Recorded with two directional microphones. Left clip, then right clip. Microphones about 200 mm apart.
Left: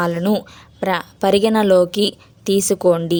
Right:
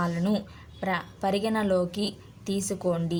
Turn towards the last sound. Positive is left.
turn(degrees=45)  # may be behind; listen again after turning